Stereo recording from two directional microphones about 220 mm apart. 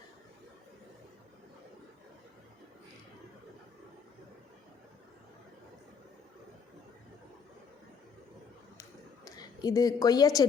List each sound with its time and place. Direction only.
9.2 s a woman's voice: 15° left (ahead or behind)